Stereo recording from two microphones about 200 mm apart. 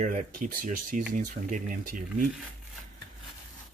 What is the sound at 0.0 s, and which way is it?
Speech, 40° right (ahead or behind).